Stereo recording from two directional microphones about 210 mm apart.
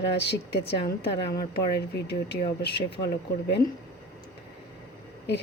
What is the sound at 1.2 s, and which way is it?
Speech, 20° left (ahead or behind).